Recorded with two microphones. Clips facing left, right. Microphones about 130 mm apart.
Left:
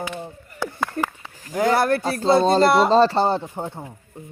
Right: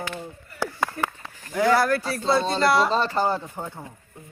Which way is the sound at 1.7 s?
25° left (ahead or behind).